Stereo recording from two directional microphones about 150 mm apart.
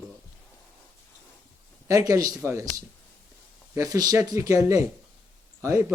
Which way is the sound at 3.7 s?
20° right (ahead or behind).